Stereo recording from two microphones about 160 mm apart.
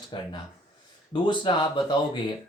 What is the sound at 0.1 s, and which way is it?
Speech, 30° left (ahead or behind).